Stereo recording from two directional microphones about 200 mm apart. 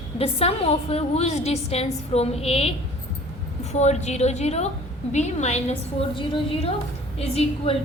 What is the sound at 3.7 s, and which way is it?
A woman's voice, 35° left (ahead or behind).